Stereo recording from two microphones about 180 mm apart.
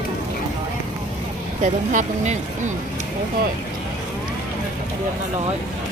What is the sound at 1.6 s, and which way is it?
Speech, 40° right (ahead or behind).